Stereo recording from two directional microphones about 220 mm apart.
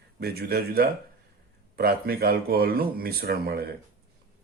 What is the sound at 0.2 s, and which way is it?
Speech, 45° right (ahead or behind).